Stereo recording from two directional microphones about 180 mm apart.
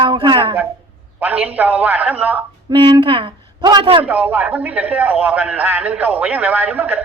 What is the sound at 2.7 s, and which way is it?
A woman's voice, 25° right (ahead or behind).